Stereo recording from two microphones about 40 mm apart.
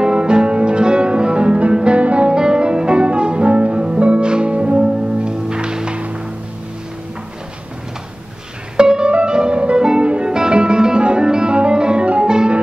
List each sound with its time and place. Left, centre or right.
0.0 s music: right
8.7 s music: right